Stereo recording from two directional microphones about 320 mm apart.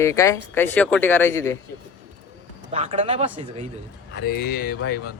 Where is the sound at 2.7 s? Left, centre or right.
Centre.